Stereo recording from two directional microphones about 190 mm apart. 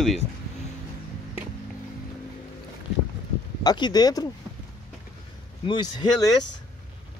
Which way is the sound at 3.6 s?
20° left (ahead or behind).